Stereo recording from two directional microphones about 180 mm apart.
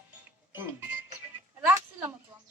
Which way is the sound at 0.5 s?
10° right (ahead or behind).